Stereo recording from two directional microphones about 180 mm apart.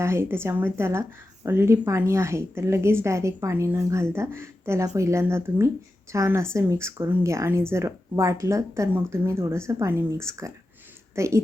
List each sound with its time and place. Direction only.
0.0 s a woman's voice: 15° right (ahead or behind)